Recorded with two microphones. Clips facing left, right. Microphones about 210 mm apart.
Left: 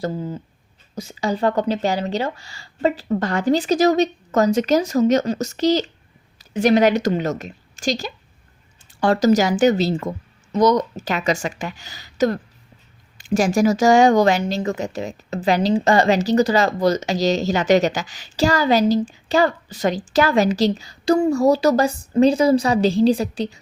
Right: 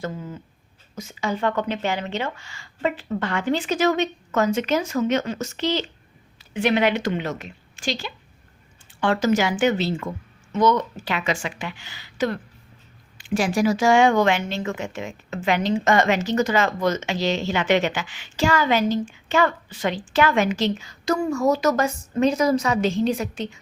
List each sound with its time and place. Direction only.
0.0 s a woman's voice: 30° left (ahead or behind)